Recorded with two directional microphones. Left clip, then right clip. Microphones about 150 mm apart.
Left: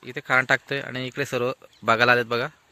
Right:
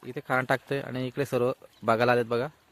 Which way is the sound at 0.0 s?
10° right (ahead or behind).